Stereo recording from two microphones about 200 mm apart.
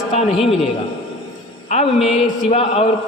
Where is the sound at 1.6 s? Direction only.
30° left (ahead or behind).